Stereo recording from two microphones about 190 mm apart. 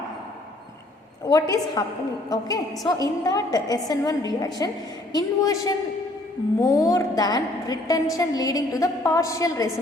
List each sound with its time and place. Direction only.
1.3 s a woman's voice: 20° left (ahead or behind)